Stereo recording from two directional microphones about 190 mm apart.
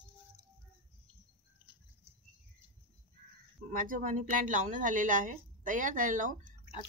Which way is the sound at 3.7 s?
45° right (ahead or behind).